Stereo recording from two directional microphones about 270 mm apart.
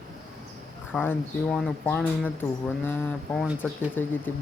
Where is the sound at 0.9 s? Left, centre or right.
Centre.